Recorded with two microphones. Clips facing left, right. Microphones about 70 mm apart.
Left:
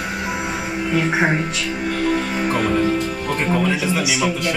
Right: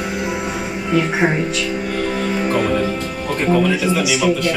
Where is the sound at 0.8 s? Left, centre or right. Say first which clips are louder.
Right 2 dB; centre.